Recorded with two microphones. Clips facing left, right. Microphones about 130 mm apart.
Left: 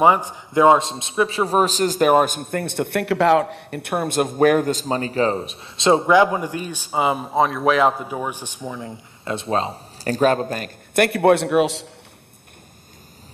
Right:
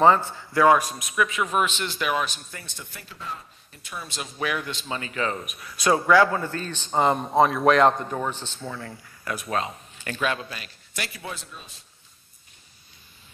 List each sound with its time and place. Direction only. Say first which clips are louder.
0.0 s a man's voice: left 2 dB; 15° left (ahead or behind); by 11.9 s 85° left